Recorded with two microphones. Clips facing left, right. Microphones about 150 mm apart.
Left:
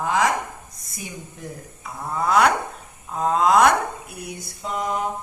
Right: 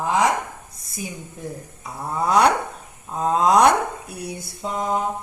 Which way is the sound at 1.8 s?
35° right (ahead or behind).